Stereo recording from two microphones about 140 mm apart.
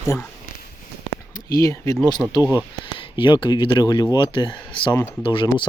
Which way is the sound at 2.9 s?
35° left (ahead or behind).